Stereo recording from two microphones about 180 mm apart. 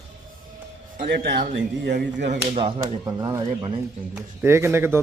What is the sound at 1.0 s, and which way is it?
Speech, 65° right (ahead or behind).